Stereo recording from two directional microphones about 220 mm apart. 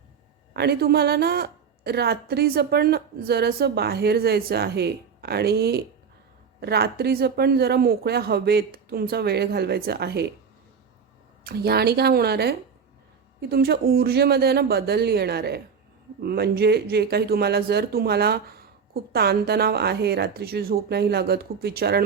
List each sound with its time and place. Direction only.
0.5 s speech: 45° right (ahead or behind)
11.4 s speech: 45° right (ahead or behind)